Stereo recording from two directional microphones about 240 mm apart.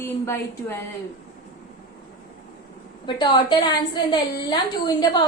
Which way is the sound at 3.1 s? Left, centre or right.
Centre.